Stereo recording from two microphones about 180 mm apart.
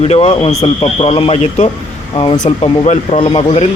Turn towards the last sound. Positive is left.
turn(degrees=35)  # may be behind; listen again after turning